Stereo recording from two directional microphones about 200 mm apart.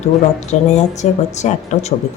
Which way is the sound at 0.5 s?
35° left (ahead or behind).